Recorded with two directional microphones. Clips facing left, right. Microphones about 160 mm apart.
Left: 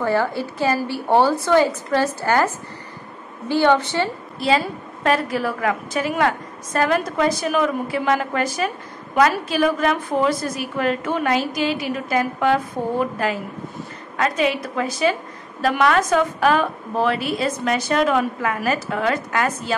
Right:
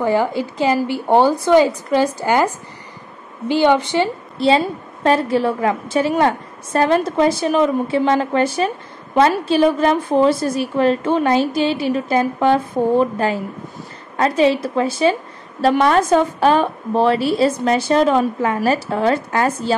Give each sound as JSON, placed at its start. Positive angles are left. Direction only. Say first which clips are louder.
{"t": 0.0, "sound": "a woman's voice", "louder": "right 3 dB", "side_deg": -15}
{"t": 4.4, "sound": "a woman's voice", "louder": "right 4 dB", "side_deg": -30}